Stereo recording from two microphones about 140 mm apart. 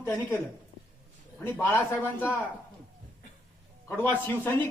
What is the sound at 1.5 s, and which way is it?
Speech, 15° left (ahead or behind).